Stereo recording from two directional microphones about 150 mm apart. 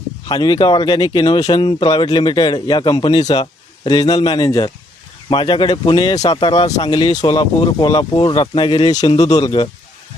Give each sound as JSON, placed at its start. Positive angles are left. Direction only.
{"t": 0.3, "sound": "speech", "side_deg": 30}
{"t": 6.1, "sound": "speech", "side_deg": 40}